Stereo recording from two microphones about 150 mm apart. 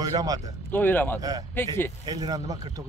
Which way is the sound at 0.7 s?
10° left (ahead or behind).